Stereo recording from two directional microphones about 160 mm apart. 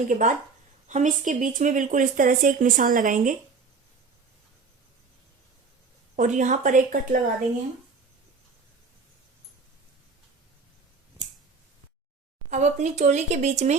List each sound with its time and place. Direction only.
0.1 s speech: 55° right (ahead or behind)
6.1 s speech: 50° right (ahead or behind)
12.5 s speech: 45° right (ahead or behind)